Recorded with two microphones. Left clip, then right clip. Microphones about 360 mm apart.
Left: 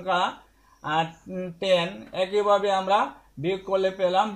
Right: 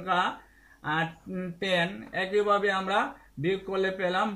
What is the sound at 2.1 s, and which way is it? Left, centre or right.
Speech, centre.